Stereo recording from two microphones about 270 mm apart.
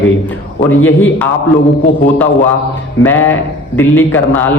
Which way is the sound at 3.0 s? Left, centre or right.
Centre.